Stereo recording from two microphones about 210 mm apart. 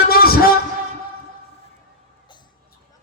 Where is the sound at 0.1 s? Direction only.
45° left (ahead or behind).